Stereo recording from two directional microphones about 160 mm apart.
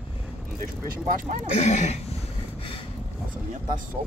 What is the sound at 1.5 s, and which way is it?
Speech, 45° left (ahead or behind).